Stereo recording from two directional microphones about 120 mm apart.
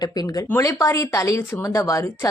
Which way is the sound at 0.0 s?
30° left (ahead or behind).